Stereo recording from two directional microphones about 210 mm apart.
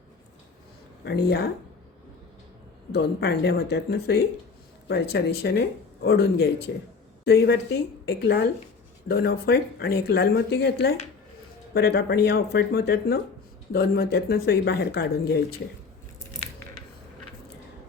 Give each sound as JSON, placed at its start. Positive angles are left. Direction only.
{"t": 1.0, "sound": "speech", "side_deg": 50}
{"t": 2.9, "sound": "speech", "side_deg": 50}